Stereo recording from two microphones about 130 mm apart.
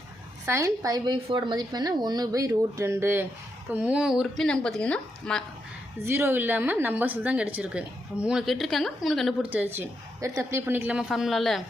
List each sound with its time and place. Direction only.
0.4 s a woman's voice: 20° right (ahead or behind); by 5.4 s 10° left (ahead or behind)
6.0 s a woman's voice: 20° right (ahead or behind); by 9.3 s centre (ahead or behind)
9.4 s a woman's voice: 10° right (ahead or behind)
11.1 s a woman's voice: centre (ahead or behind)